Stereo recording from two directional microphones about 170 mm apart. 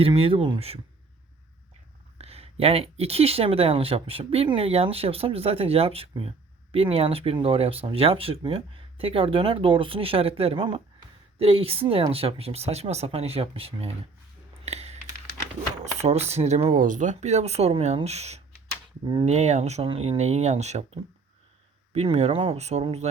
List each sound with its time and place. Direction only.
0.0 s speech: 35° right (ahead or behind)
2.1 s speech: 35° right (ahead or behind)
14.6 s typing: 40° right (ahead or behind)
15.8 s speech: 40° right (ahead or behind)